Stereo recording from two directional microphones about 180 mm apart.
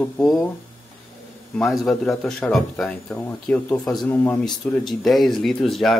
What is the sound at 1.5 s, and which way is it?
Speech, centre (ahead or behind).